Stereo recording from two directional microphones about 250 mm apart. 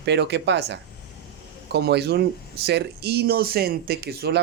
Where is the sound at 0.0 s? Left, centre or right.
Right.